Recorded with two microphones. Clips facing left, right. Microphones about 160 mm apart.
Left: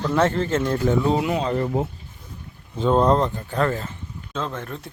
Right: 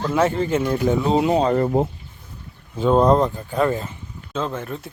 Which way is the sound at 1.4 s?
45° right (ahead or behind).